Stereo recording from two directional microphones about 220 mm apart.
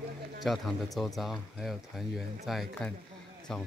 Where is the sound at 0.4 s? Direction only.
Centre (ahead or behind).